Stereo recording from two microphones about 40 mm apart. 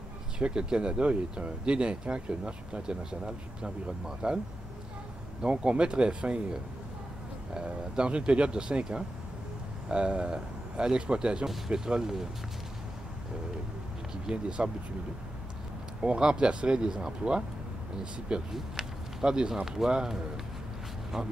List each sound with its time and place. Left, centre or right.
0.4 s speech: right
5.4 s speech: right
9.8 s speech: right
14.3 s speech: centre
16.0 s speech: right
18.5 s speech: centre